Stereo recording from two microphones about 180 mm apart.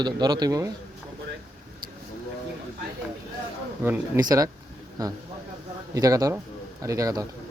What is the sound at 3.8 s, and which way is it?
A man's voice, 15° right (ahead or behind).